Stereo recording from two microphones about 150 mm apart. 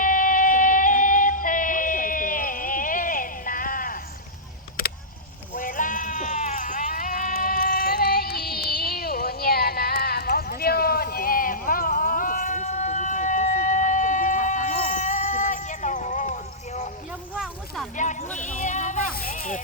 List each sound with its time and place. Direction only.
0.0 s music: 65° left (ahead or behind)
5.5 s sheep: 65° left (ahead or behind)
17.1 s a sound: 5° right (ahead or behind)
17.9 s a sound: 55° left (ahead or behind)
18.3 s music: 55° left (ahead or behind)
19.1 s music: 75° left (ahead or behind)